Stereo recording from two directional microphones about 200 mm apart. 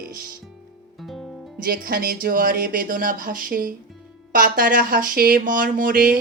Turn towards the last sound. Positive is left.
turn(degrees=-45)  # may be behind; listen again after turning